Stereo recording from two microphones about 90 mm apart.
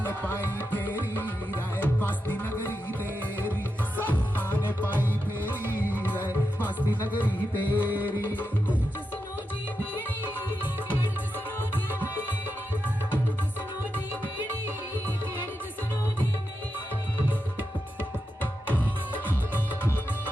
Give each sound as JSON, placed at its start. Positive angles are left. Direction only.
{"t": 0.0, "sound": "music", "side_deg": 20}
{"t": 6.0, "sound": "music", "side_deg": 20}
{"t": 7.7, "sound": "music", "side_deg": -20}
{"t": 8.0, "sound": "music", "side_deg": 20}
{"t": 11.9, "sound": "music", "side_deg": 20}
{"t": 19.3, "sound": "music", "side_deg": 20}